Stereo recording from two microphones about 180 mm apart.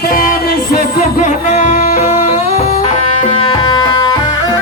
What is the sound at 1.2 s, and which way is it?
Music, 40° left (ahead or behind).